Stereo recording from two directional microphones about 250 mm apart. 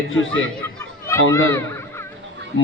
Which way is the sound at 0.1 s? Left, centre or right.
Left.